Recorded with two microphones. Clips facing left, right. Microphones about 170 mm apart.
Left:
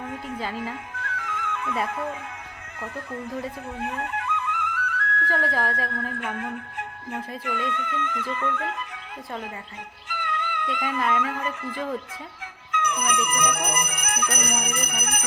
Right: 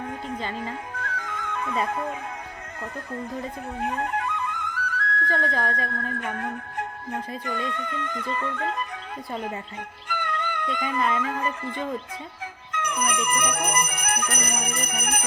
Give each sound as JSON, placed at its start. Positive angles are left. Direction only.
{"t": 0.9, "sound": "music", "side_deg": -35}
{"t": 1.9, "sound": "speech", "side_deg": -35}
{"t": 3.8, "sound": "flute", "side_deg": -35}
{"t": 5.3, "sound": "speech", "side_deg": 5}
{"t": 6.1, "sound": "speech", "side_deg": -40}
{"t": 10.1, "sound": "music", "side_deg": -45}
{"t": 11.2, "sound": "speech", "side_deg": -30}